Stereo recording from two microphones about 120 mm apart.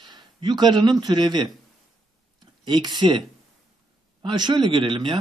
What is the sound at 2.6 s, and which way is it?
Speech, 40° right (ahead or behind).